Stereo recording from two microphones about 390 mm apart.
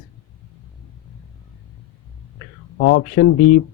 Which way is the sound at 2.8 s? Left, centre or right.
Left.